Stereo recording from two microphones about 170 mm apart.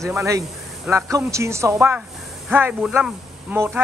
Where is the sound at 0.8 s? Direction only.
15° right (ahead or behind).